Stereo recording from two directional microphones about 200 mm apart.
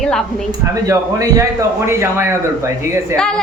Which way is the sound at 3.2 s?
5° left (ahead or behind).